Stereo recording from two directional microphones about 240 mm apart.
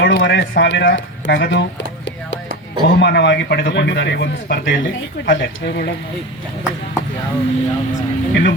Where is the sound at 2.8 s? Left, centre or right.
Left.